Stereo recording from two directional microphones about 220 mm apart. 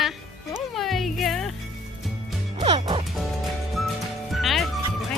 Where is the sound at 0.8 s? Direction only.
Centre (ahead or behind).